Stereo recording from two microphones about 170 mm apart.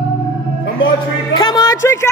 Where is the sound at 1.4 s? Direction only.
25° left (ahead or behind).